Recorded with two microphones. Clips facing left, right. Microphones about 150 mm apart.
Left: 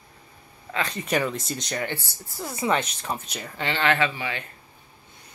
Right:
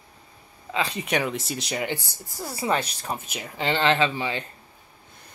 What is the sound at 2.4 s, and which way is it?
Speech, 35° right (ahead or behind).